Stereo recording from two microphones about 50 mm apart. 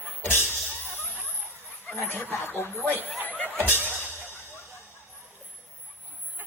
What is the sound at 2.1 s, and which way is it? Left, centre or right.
Speech, left.